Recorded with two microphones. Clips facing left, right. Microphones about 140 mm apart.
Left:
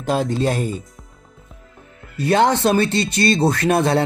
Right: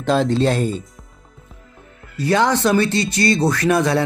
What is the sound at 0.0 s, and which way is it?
Speech, 10° left (ahead or behind).